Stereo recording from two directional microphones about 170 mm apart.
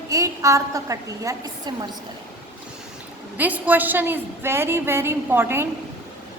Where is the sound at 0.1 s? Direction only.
20° right (ahead or behind).